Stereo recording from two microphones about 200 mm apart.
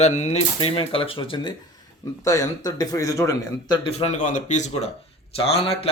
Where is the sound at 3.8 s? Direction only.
30° left (ahead or behind).